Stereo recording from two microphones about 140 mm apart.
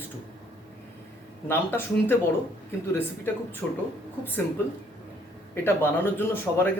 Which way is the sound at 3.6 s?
5° left (ahead or behind).